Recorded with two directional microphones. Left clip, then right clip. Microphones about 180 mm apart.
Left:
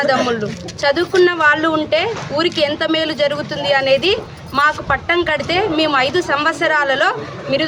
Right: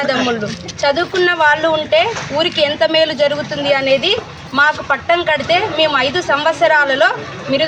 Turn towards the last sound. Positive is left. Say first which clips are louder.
# right 1 dB
turn(degrees=25)  # may be behind; listen again after turning